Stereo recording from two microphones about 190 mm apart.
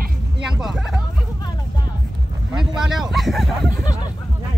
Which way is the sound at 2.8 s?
Centre (ahead or behind).